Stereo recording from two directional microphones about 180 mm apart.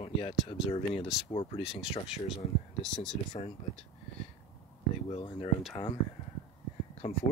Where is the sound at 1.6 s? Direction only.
5° right (ahead or behind).